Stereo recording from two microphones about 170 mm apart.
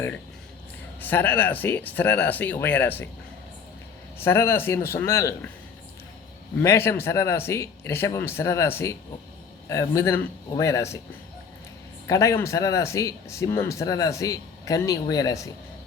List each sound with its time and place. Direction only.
1.0 s speech: 10° left (ahead or behind)
4.2 s speech: 15° left (ahead or behind)
6.6 s speech: 15° left (ahead or behind)
12.0 s speech: 20° left (ahead or behind)